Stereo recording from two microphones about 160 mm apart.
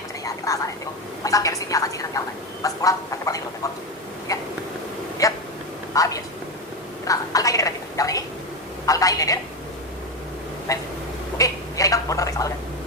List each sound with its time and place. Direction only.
0.3 s a woman's voice: 20° left (ahead or behind)
2.6 s duck: 20° left (ahead or behind)
4.3 s hiccup: 20° left (ahead or behind)
5.2 s a sound: 20° left (ahead or behind)
8.9 s telephone: 20° left (ahead or behind)
10.7 s a sound: 20° left (ahead or behind)